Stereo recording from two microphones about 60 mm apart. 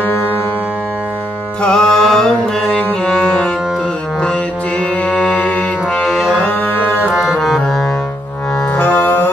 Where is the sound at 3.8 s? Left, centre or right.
Centre; by 6.9 s left.